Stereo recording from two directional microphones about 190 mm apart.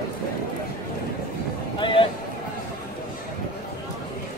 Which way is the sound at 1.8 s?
25° left (ahead or behind).